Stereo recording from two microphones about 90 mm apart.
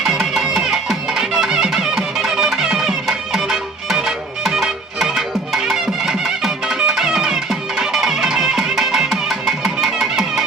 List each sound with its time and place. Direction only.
0.0 s music: 5° right (ahead or behind)